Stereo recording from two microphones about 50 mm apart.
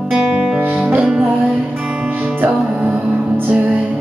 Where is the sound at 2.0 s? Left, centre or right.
Right.